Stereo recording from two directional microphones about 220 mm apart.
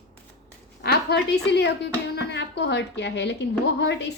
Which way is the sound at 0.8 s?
45° left (ahead or behind).